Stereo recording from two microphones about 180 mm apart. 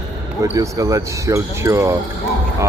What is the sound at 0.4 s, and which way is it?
Speech, 15° right (ahead or behind).